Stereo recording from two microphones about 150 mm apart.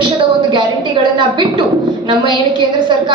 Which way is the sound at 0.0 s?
35° right (ahead or behind).